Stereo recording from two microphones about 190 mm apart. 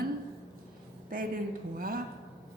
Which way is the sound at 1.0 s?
50° right (ahead or behind).